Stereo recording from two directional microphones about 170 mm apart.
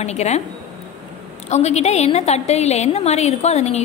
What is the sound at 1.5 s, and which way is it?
A woman's voice, 40° left (ahead or behind).